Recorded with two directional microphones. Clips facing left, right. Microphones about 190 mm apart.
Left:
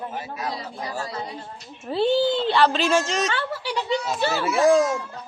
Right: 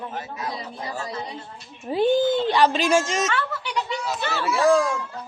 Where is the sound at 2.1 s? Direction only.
50° right (ahead or behind).